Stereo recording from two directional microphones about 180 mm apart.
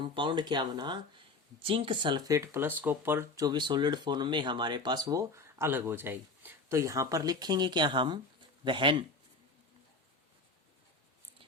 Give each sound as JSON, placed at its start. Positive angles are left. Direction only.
{"t": 0.1, "sound": "speech", "side_deg": -25}